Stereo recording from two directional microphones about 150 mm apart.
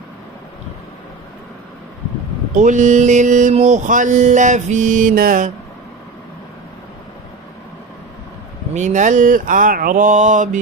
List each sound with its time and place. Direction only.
2.5 s mantra: 55° right (ahead or behind)
8.7 s mantra: 55° right (ahead or behind)